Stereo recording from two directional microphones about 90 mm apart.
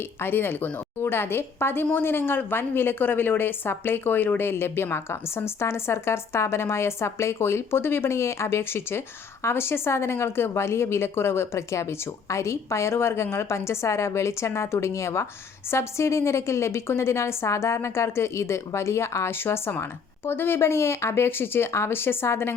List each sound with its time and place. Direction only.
0.2 s a woman's voice: 25° left (ahead or behind)